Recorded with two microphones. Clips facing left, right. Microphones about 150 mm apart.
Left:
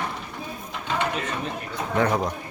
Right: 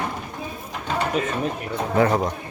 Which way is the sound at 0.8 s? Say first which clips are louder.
Right 2 dB; 40° right (ahead or behind).